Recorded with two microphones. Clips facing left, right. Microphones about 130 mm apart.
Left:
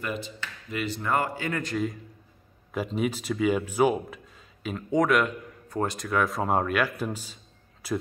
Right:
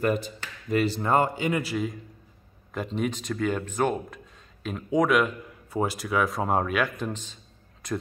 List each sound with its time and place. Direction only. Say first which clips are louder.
0.0 s speech: right 7 dB; 45° right (ahead or behind); by 1.6 s 20° right (ahead or behind)
1.6 s a man's voice: even; 5° right (ahead or behind)